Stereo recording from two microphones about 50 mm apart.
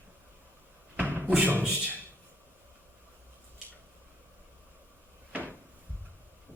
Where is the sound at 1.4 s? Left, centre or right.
Right.